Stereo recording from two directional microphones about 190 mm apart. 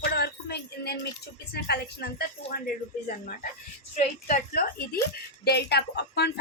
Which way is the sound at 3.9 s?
45° left (ahead or behind).